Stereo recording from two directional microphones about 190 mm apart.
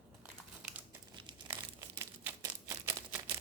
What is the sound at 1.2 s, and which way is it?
Crumpling, 20° right (ahead or behind).